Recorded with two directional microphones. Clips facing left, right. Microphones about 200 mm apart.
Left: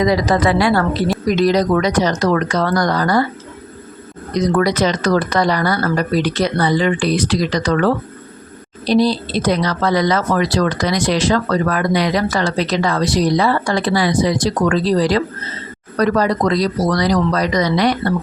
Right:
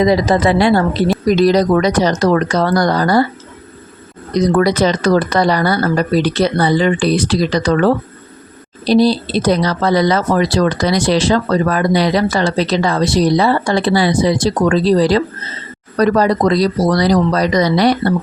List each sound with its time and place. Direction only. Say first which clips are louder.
0.0 s a woman's voice: right 3 dB; 25° right (ahead or behind)
1.4 s speech: right 2 dB; 35° right (ahead or behind)
4.4 s speech: right 3 dB; 30° right (ahead or behind)